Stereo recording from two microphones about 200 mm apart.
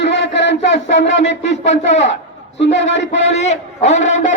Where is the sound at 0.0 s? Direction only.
60° left (ahead or behind).